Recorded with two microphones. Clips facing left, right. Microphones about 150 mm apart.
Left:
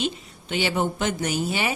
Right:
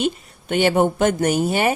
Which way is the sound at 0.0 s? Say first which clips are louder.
Right 5 dB; 55° right (ahead or behind).